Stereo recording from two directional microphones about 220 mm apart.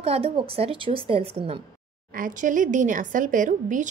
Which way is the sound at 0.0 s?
25° right (ahead or behind).